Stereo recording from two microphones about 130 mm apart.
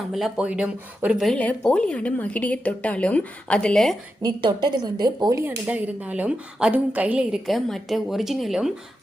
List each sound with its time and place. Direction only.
0.1 s a woman's voice: centre (ahead or behind)
1.3 s a woman's voice: 10° left (ahead or behind)
4.2 s a woman's voice: 35° right (ahead or behind)
5.4 s a woman's voice: 15° right (ahead or behind)
7.4 s speech: centre (ahead or behind)